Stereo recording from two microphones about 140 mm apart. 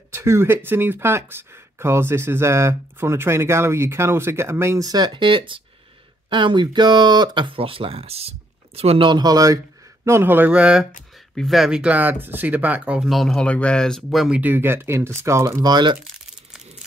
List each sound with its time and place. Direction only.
0.1 s speech: 20° right (ahead or behind)